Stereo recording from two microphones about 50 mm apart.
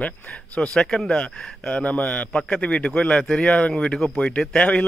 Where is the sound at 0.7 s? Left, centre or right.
Centre.